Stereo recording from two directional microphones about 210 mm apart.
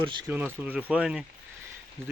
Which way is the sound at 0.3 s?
10° right (ahead or behind).